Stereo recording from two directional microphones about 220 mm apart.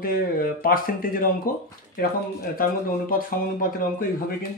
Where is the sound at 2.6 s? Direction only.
40° left (ahead or behind).